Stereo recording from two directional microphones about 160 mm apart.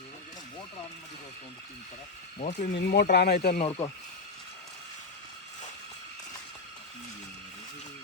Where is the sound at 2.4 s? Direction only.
50° left (ahead or behind).